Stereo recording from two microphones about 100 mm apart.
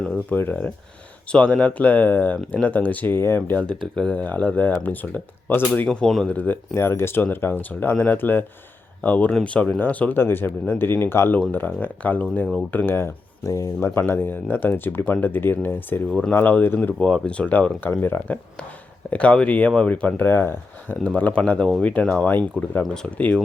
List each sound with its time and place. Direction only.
0.3 s speech: 20° left (ahead or behind)
5.9 s speech: 5° left (ahead or behind)
6.3 s speech: 20° left (ahead or behind)